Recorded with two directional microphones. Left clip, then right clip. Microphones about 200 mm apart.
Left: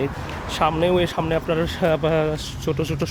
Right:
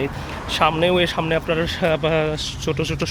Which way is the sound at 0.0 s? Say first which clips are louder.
Even; 10° left (ahead or behind).